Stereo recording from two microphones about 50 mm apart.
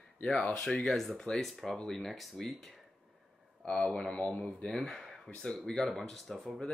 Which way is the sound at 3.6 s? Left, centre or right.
Centre.